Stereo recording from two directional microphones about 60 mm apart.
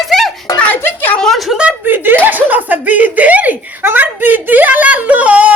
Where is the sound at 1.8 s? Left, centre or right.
Right.